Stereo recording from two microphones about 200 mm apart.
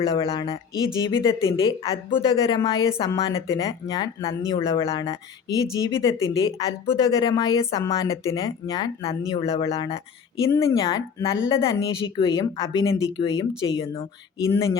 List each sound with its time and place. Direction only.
0.2 s speech: 30° left (ahead or behind)
1.1 s speech: 15° left (ahead or behind)